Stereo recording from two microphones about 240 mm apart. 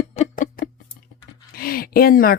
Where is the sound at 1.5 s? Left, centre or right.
Left.